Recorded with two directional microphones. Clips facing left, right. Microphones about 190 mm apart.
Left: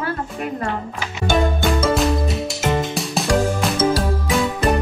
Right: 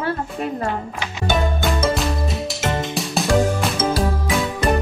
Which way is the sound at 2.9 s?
Centre (ahead or behind).